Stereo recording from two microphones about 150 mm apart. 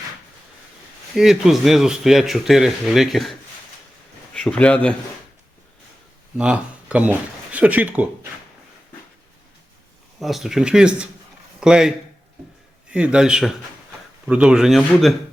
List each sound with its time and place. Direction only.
1.1 s speech: centre (ahead or behind)
4.4 s speech: 5° left (ahead or behind)
6.3 s speech: 5° right (ahead or behind)
10.2 s speech: centre (ahead or behind)